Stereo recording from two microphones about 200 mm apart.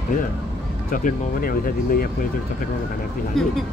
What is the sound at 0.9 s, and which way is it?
Speech, 45° left (ahead or behind).